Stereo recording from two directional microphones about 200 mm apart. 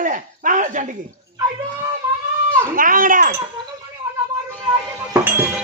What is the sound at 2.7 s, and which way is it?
Speech, 45° right (ahead or behind).